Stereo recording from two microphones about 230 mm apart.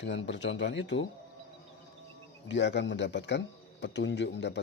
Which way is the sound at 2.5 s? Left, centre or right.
Left.